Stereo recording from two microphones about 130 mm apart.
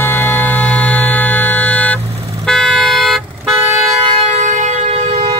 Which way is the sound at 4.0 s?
50° right (ahead or behind).